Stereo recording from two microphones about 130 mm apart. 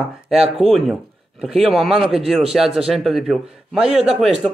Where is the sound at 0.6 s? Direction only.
Centre (ahead or behind).